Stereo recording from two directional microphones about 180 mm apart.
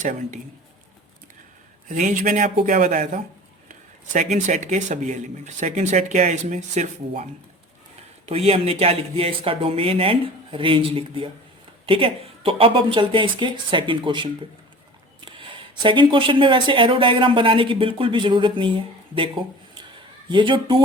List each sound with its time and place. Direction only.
0.0 s speech: 45° right (ahead or behind)
1.9 s speech: 45° right (ahead or behind)
8.3 s speech: 35° right (ahead or behind)